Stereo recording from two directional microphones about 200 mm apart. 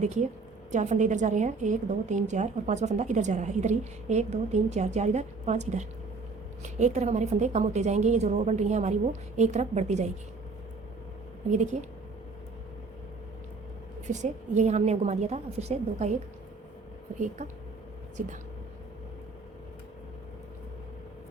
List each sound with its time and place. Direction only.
0.0 s a woman's voice: 35° right (ahead or behind)
11.5 s a woman's voice: 35° right (ahead or behind)
14.1 s a woman's voice: 35° right (ahead or behind)